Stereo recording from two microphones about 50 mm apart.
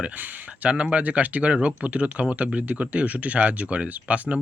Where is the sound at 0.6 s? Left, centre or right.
Right.